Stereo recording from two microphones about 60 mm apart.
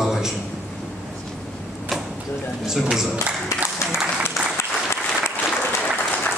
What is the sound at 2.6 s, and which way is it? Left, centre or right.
Speech, centre.